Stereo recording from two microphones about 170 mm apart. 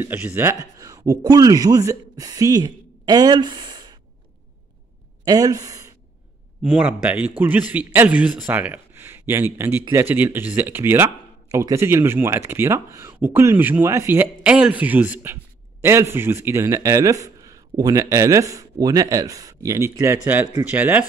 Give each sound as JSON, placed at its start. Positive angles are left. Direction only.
{"t": 0.0, "sound": "speech", "side_deg": -10}
{"t": 5.2, "sound": "a woman's voice", "side_deg": -20}
{"t": 6.6, "sound": "speech", "side_deg": -5}